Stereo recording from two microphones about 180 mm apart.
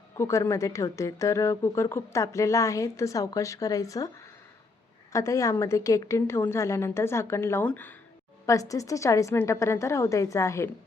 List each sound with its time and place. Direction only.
0.2 s a woman's voice: 15° left (ahead or behind)
5.1 s a woman's voice: 15° left (ahead or behind)